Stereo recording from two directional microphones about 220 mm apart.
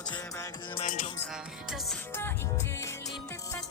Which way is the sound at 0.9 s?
35° left (ahead or behind).